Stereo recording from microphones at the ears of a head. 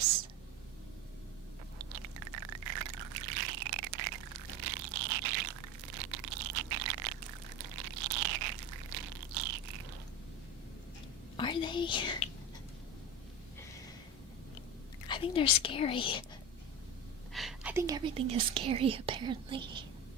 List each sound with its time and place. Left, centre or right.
1.8 s a sound: right
11.5 s speech: left
15.0 s speech: left
17.8 s speech: right